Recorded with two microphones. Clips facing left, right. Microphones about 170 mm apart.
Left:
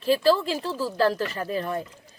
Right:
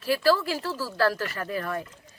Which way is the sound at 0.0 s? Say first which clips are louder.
Left 2 dB; 20° left (ahead or behind).